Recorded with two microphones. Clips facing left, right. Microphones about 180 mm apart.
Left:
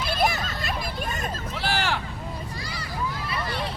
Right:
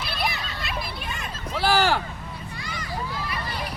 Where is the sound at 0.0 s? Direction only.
45° left (ahead or behind).